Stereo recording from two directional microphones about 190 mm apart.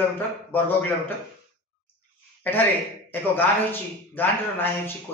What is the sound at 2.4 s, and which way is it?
A man's voice, 10° left (ahead or behind).